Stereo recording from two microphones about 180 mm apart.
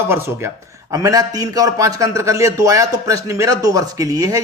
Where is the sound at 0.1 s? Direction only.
15° right (ahead or behind).